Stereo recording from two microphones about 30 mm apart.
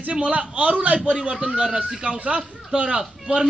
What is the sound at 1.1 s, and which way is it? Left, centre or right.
Speech, right.